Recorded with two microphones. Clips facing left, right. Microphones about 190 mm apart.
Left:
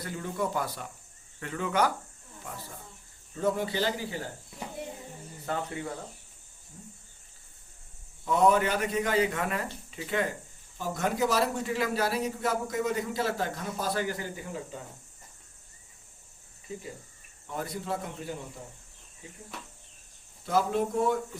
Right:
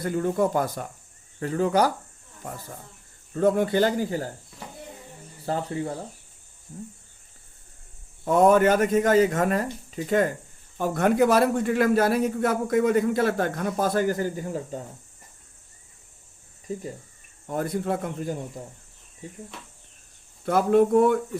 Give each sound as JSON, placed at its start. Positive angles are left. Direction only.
{"t": 0.0, "sound": "speech", "side_deg": -50}
{"t": 3.3, "sound": "speech", "side_deg": -55}
{"t": 5.5, "sound": "speech", "side_deg": -30}
{"t": 6.7, "sound": "speech", "side_deg": -55}
{"t": 8.2, "sound": "speech", "side_deg": -50}
{"t": 10.8, "sound": "a man's voice", "side_deg": -60}
{"t": 17.4, "sound": "speech", "side_deg": -50}
{"t": 20.4, "sound": "a man's voice", "side_deg": -55}